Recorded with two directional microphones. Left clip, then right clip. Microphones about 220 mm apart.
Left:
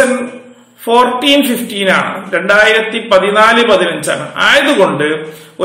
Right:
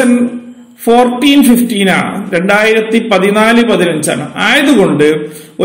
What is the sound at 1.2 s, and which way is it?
A man's voice, 35° right (ahead or behind).